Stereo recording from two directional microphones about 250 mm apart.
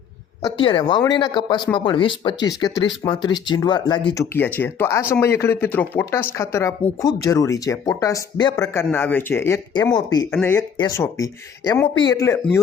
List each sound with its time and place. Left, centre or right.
0.4 s speech: centre